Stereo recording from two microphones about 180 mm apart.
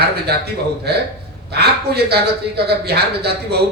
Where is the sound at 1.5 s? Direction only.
65° right (ahead or behind).